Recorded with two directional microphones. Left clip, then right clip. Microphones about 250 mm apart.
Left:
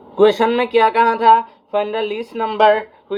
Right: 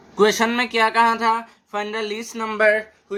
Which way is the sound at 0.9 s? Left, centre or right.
Right.